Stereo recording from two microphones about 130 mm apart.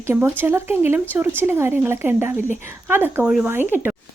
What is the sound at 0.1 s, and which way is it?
A woman's voice, 15° right (ahead or behind).